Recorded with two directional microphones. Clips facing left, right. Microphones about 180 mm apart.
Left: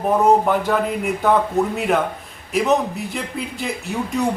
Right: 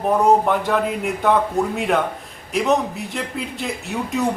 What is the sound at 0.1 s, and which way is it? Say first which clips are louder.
A man's voice: left 1 dB; centre (ahead or behind).